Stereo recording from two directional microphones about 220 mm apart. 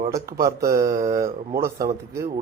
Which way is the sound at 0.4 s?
15° right (ahead or behind).